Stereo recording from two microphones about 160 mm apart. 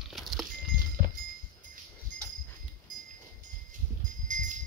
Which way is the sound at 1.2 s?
60° right (ahead or behind).